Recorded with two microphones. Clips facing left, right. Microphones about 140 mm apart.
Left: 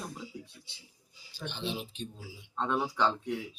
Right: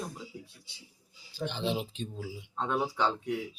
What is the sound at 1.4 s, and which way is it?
Speech, 90° right.